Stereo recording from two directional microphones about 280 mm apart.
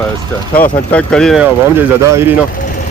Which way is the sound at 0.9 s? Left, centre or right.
Centre.